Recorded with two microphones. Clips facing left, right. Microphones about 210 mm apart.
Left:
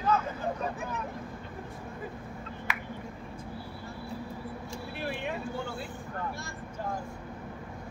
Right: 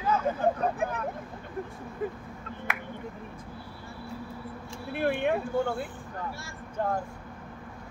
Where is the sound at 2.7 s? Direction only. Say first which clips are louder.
Right 2 dB; 55° right (ahead or behind).